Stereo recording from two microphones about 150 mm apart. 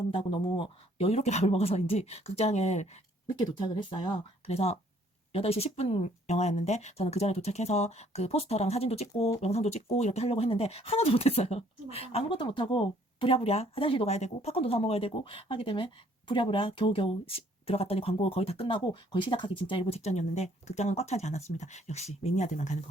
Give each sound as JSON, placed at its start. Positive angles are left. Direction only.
{"t": 0.1, "sound": "speech", "side_deg": 35}
{"t": 3.4, "sound": "speech", "side_deg": 30}